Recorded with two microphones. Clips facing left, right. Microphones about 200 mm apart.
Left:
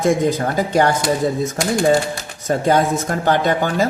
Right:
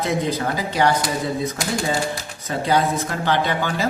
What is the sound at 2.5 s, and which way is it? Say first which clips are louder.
Speech: left 4 dB; 45° left (ahead or behind).